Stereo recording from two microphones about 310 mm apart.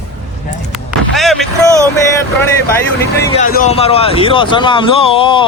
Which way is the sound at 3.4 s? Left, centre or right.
Left.